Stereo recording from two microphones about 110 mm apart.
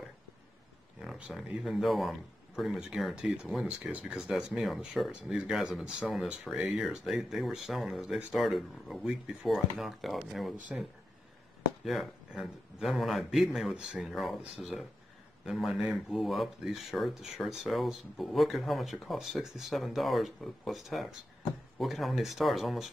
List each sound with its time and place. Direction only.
1.0 s speech: 5° right (ahead or behind)